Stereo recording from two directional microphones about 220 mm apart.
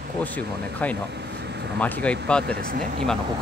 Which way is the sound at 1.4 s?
50° right (ahead or behind).